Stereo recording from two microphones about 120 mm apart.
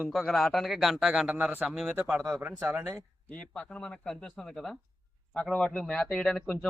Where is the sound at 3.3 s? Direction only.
10° left (ahead or behind).